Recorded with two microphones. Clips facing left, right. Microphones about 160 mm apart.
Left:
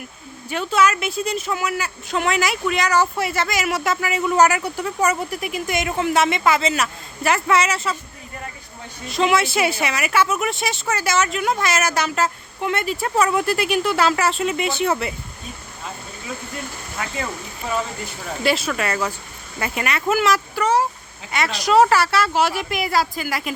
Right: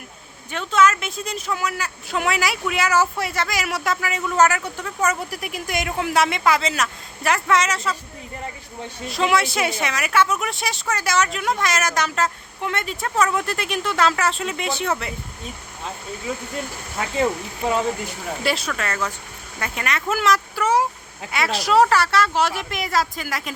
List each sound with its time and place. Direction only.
0.5 s speech: 5° left (ahead or behind)
5.2 s speech: centre (ahead or behind)
9.0 s speech: centre (ahead or behind)
17.0 s speech: 30° right (ahead or behind)
18.4 s speech: centre (ahead or behind)